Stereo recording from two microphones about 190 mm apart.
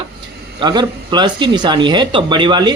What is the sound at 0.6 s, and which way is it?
Speech, 25° right (ahead or behind).